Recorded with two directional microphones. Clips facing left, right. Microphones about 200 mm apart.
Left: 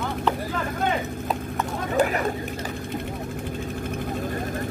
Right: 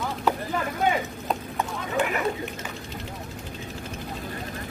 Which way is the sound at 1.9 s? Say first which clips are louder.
Left 3 dB; 40° left (ahead or behind).